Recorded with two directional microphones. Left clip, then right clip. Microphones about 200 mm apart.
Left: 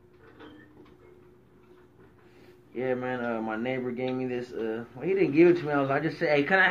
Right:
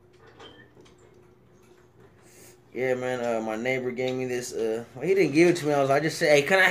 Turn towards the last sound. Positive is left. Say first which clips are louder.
# right 3 dB
turn(degrees=-35)  # may be behind; listen again after turning